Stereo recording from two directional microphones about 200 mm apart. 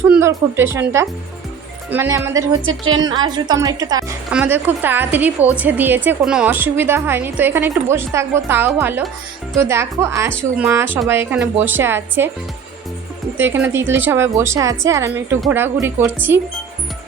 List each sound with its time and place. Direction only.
0.1 s a woman's voice: 10° right (ahead or behind)
4.3 s a woman's voice: 5° right (ahead or behind)
13.3 s a woman's voice: 10° right (ahead or behind)